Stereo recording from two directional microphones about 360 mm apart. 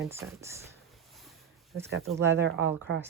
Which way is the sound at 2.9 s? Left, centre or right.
Right.